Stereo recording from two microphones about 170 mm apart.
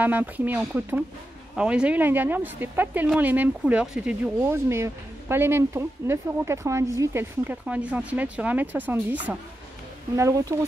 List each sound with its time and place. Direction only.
0.0 s a woman's voice: 10° right (ahead or behind)